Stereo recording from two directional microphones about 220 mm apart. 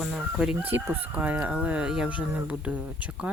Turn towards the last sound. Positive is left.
turn(degrees=-5)  # may be behind; listen again after turning